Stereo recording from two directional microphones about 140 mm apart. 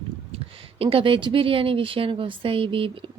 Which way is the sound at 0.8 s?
40° right (ahead or behind).